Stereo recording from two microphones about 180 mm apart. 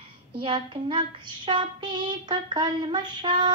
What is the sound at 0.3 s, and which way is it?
Child singing, 30° right (ahead or behind).